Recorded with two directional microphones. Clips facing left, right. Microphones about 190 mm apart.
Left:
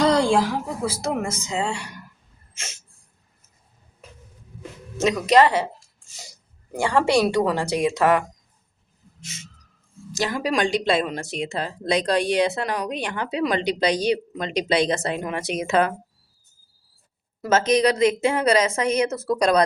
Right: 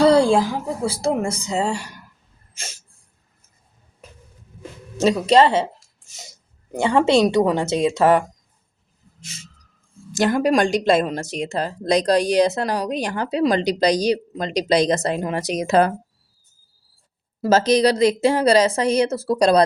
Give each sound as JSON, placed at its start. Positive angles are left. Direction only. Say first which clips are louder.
{"t": 0.0, "sound": "a sound", "louder": "right 5 dB", "side_deg": -30}
{"t": 0.8, "sound": "speech", "louder": "right 7 dB", "side_deg": -30}
{"t": 4.9, "sound": "speech", "louder": "right 2 dB", "side_deg": -30}
{"t": 6.7, "sound": "speech", "louder": "right 3 dB", "side_deg": -20}
{"t": 10.1, "sound": "speech", "louder": "right 7 dB", "side_deg": -50}
{"t": 17.4, "sound": "speech", "louder": "right 3 dB", "side_deg": -35}